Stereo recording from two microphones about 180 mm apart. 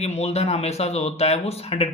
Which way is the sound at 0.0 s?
35° left (ahead or behind).